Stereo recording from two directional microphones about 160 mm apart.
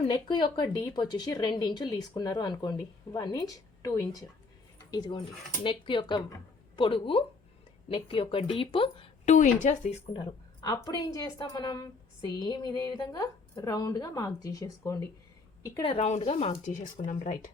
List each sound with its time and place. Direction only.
0.1 s a woman's voice: 30° left (ahead or behind)
9.2 s speech: 50° left (ahead or behind)
10.8 s a woman's voice: 25° left (ahead or behind)
15.8 s speech: 40° left (ahead or behind)